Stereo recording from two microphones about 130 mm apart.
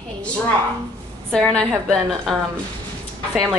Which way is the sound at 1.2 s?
5° left (ahead or behind).